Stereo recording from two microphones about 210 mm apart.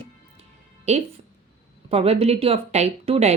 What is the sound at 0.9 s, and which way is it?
Speech, 30° right (ahead or behind).